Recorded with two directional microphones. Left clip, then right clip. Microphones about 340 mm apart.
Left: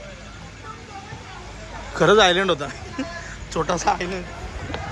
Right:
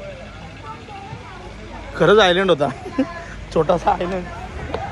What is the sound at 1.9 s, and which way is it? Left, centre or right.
A man's voice, centre.